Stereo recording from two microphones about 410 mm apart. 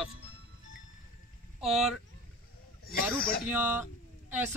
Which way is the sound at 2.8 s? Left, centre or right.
Left.